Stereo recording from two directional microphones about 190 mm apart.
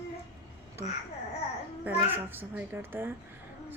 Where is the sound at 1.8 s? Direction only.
10° right (ahead or behind).